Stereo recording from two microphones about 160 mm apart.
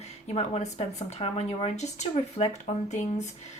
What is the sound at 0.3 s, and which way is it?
A woman's voice, 40° left (ahead or behind).